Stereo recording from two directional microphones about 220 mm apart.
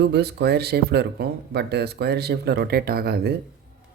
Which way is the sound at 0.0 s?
50° right (ahead or behind).